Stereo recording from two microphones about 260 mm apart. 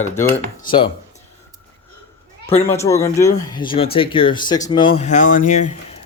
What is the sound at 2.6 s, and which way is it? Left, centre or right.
Speech, centre.